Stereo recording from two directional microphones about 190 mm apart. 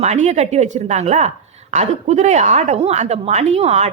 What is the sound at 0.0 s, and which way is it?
A woman's voice, 35° right (ahead or behind).